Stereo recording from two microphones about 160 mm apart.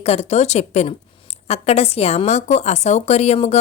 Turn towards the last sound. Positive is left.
turn(degrees=40)  # may be behind; listen again after turning